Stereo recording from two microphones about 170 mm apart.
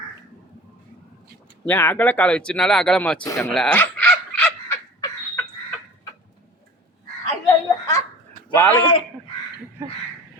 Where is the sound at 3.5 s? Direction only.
5° left (ahead or behind).